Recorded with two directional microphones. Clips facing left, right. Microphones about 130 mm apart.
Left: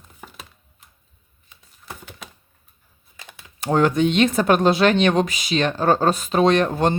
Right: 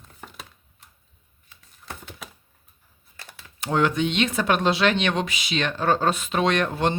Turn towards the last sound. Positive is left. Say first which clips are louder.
# left 5 dB
turn(degrees=40)  # may be behind; listen again after turning